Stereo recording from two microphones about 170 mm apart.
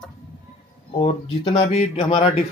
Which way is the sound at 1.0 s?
35° left (ahead or behind).